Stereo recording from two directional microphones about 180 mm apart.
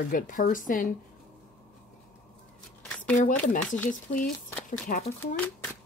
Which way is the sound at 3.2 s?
45° left (ahead or behind).